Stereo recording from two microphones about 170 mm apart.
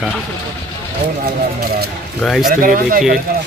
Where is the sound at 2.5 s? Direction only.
55° right (ahead or behind).